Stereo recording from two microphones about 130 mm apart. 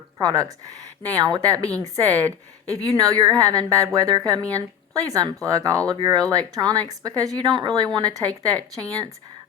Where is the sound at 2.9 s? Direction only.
30° right (ahead or behind).